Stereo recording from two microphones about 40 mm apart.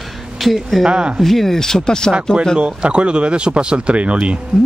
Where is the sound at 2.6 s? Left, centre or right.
Right.